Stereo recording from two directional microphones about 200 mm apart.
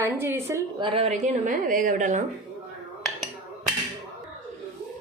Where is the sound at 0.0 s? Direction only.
10° right (ahead or behind); by 2.2 s 40° right (ahead or behind).